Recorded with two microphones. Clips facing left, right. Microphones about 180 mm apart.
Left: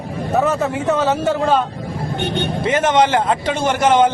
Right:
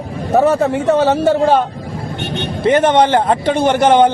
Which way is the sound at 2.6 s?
60° right (ahead or behind).